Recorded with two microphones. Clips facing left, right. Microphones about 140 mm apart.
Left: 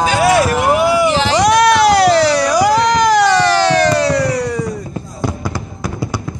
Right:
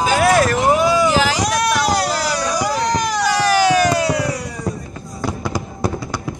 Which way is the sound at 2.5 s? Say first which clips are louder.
Left 7 dB; 80° left.